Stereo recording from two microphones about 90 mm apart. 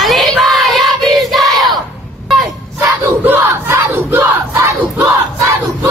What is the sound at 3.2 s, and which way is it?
Crowd, 25° right (ahead or behind).